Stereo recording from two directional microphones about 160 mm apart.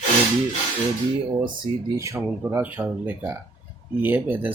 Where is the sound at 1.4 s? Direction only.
25° right (ahead or behind).